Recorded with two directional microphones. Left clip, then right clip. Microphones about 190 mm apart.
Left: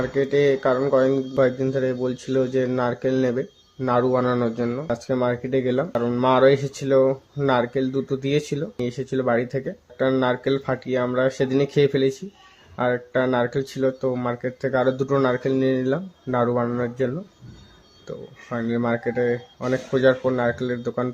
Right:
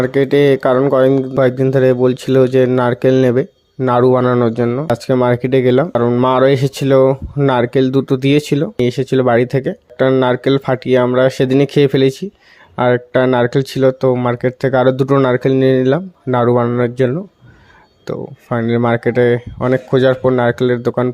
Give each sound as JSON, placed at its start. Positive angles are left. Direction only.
{"t": 0.0, "sound": "speech", "side_deg": -50}